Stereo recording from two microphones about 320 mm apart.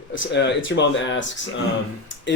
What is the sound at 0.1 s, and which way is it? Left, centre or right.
Speech, left.